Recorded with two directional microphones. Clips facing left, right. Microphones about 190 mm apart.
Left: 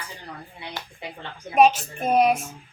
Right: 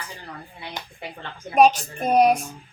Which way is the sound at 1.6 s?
5° left (ahead or behind).